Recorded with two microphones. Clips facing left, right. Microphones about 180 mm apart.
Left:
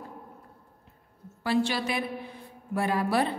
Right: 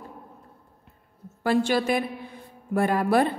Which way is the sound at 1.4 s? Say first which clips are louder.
Right 4 dB; 50° right (ahead or behind).